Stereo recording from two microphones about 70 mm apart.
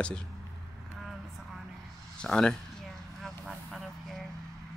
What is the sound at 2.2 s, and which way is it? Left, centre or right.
Speech, centre.